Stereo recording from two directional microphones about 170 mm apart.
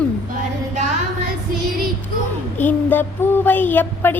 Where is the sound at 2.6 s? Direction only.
10° left (ahead or behind).